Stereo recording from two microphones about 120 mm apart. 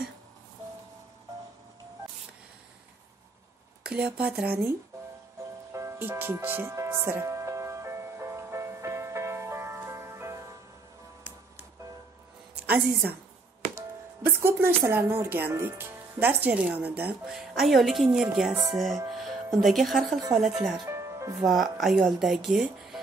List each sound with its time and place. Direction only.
3.8 s speech: 10° right (ahead or behind)
5.7 s music: 25° right (ahead or behind)
13.7 s speech: 20° right (ahead or behind)
17.3 s speech: centre (ahead or behind)
20.9 s music: 25° right (ahead or behind)
21.4 s speech: centre (ahead or behind)